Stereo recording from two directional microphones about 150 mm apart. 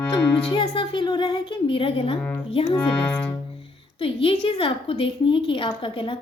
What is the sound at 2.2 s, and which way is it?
Music, 15° left (ahead or behind).